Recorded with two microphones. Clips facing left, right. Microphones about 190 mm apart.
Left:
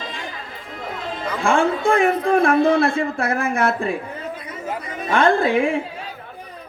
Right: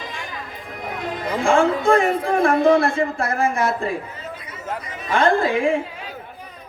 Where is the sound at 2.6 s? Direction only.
15° right (ahead or behind).